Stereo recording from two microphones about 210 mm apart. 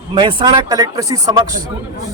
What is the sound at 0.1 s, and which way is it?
A man's voice, 25° right (ahead or behind).